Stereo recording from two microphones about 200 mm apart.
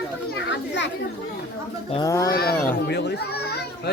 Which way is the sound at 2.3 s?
50° left (ahead or behind).